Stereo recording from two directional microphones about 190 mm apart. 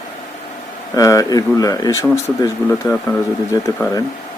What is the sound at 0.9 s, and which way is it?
Speech, 20° left (ahead or behind).